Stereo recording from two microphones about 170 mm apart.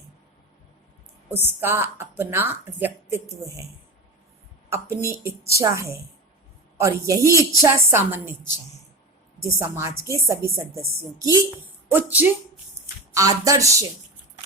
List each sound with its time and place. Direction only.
1.3 s a woman's voice: 15° right (ahead or behind)
4.7 s a woman's voice: 15° right (ahead or behind)
9.4 s a woman's voice: 15° right (ahead or behind)